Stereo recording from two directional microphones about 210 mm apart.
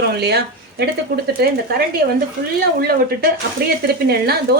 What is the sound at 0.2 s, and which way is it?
Speech, 50° right (ahead or behind).